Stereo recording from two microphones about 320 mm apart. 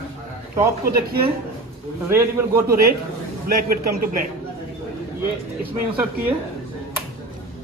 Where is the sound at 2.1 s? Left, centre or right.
Centre.